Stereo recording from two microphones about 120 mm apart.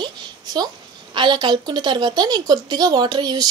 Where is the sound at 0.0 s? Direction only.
35° right (ahead or behind).